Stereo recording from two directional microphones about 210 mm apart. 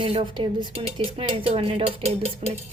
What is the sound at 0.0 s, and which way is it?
Speech, 25° right (ahead or behind).